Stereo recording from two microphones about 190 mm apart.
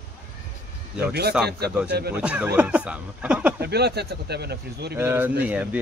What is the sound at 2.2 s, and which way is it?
Speech, 5° right (ahead or behind).